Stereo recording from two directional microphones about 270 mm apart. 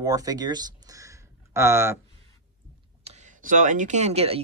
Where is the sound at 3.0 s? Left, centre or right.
Right.